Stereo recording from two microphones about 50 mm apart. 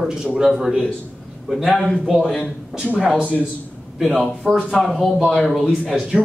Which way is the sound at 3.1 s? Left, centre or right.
Right.